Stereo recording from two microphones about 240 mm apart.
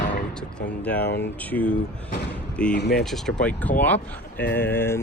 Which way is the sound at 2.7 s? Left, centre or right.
Left.